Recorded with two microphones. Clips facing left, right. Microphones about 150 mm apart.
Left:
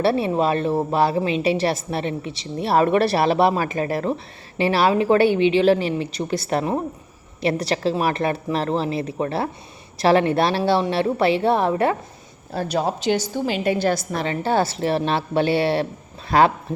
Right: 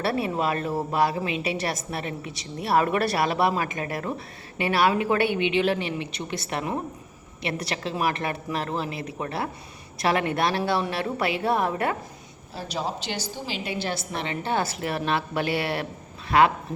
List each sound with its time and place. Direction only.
0.0 s a woman's voice: 25° left (ahead or behind)
12.5 s a woman's voice: 55° left (ahead or behind); by 16.5 s 35° left (ahead or behind)